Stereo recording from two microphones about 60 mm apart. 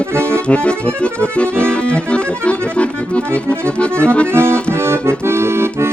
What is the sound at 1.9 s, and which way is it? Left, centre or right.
Accordion, centre.